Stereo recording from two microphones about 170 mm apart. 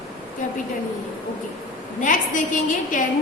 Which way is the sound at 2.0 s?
50° left (ahead or behind).